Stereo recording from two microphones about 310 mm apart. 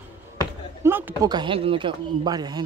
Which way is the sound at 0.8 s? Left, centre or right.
Centre.